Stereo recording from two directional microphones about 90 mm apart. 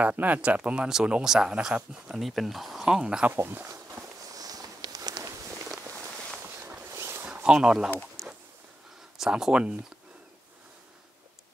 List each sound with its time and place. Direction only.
0.0 s speech: 20° right (ahead or behind)
3.3 s walk: 25° right (ahead or behind); by 5.3 s 45° right (ahead or behind)
6.9 s a sound: 30° right (ahead or behind)
7.4 s speech: 5° right (ahead or behind)
9.2 s speech: 10° right (ahead or behind)